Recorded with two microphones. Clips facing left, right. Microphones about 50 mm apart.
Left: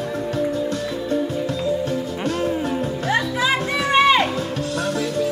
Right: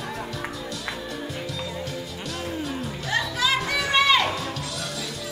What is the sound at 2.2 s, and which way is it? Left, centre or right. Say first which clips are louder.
Music: left 8 dB; left.